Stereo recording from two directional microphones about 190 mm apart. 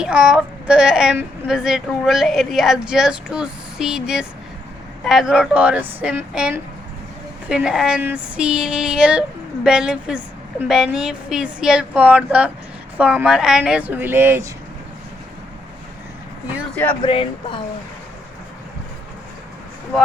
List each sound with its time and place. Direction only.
0.0 s a woman's voice: 5° right (ahead or behind)
16.7 s speech: 10° left (ahead or behind)
17.0 s speech: 30° left (ahead or behind)